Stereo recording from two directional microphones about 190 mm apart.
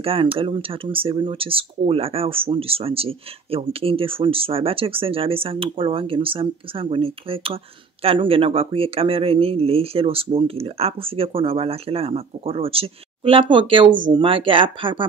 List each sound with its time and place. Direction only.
0.0 s speech: 30° right (ahead or behind)